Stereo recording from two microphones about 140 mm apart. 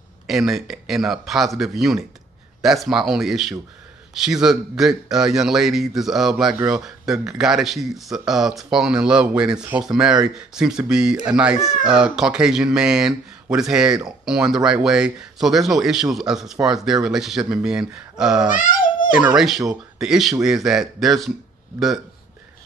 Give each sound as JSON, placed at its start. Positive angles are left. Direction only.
{"t": 0.3, "sound": "speech", "side_deg": 0}
{"t": 18.5, "sound": "babbling", "side_deg": 70}
{"t": 19.1, "sound": "speech", "side_deg": -5}